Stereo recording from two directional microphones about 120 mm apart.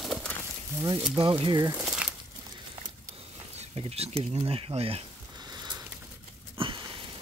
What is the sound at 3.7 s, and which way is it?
Speech, 55° right (ahead or behind).